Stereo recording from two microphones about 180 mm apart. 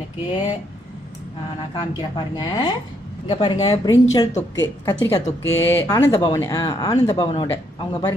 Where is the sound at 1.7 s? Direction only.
25° left (ahead or behind).